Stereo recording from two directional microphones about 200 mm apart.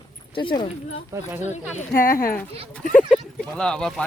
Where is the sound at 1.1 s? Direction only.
15° right (ahead or behind).